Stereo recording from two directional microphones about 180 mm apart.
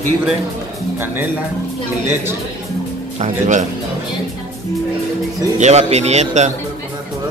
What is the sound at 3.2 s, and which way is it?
Speech, 45° right (ahead or behind).